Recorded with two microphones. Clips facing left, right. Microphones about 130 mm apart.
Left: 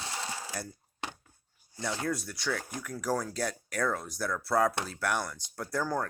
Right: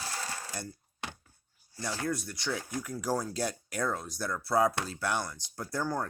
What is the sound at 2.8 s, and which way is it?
Speech, 5° right (ahead or behind).